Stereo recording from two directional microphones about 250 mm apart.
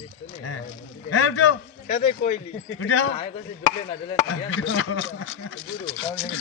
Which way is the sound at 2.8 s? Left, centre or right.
Left.